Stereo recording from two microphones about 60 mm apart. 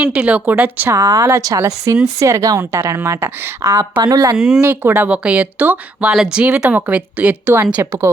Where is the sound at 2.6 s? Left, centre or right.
Right.